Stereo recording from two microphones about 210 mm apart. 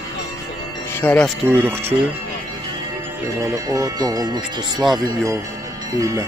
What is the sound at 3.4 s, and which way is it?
Speech, 15° right (ahead or behind).